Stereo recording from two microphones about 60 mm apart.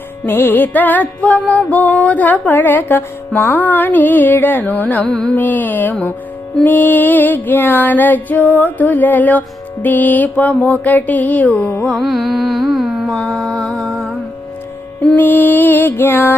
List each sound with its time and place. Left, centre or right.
0.3 s music: left
5.0 s carnatic music: centre
5.3 s music: left
9.8 s a sound: left
11.9 s carnatic music: centre
13.1 s music: centre
15.1 s music: left